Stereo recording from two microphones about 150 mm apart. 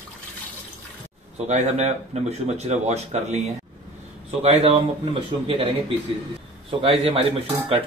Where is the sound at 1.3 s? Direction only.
50° right (ahead or behind).